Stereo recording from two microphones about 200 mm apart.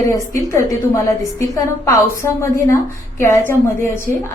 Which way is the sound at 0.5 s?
15° left (ahead or behind).